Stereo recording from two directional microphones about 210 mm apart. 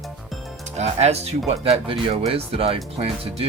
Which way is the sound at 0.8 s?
30° right (ahead or behind).